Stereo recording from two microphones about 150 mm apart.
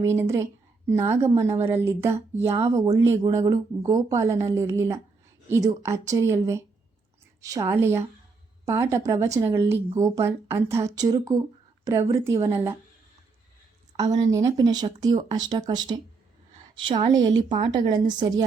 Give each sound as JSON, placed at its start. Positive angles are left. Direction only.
{"t": 0.0, "sound": "speech", "side_deg": -20}
{"t": 14.1, "sound": "a woman's voice", "side_deg": -25}